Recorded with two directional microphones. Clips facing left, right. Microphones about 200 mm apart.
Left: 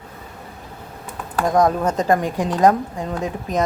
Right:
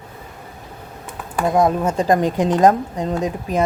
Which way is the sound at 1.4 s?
5° right (ahead or behind).